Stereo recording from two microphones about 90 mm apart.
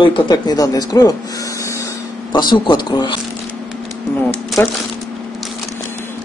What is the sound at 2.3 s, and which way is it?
Speech, 60° left (ahead or behind).